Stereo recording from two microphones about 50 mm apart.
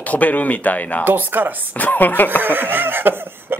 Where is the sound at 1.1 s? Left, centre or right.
Right.